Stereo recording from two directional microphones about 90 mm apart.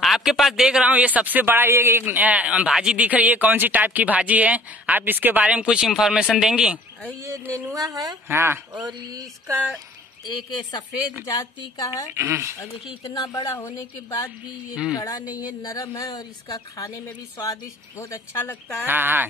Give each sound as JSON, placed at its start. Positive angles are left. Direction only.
{"t": 0.0, "sound": "speech", "side_deg": -5}
{"t": 7.2, "sound": "speech", "side_deg": -35}
{"t": 8.3, "sound": "speech", "side_deg": -25}
{"t": 8.8, "sound": "speech", "side_deg": -45}
{"t": 11.2, "sound": "a woman's voice", "side_deg": 45}
{"t": 12.1, "sound": "speech", "side_deg": -30}
{"t": 13.1, "sound": "a woman's voice", "side_deg": 45}
{"t": 14.7, "sound": "speech", "side_deg": -10}
{"t": 15.0, "sound": "a woman's voice", "side_deg": 45}
{"t": 18.4, "sound": "speech", "side_deg": 20}
{"t": 18.9, "sound": "speech", "side_deg": -20}